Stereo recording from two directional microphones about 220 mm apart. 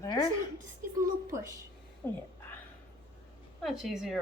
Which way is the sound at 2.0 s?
10° left (ahead or behind).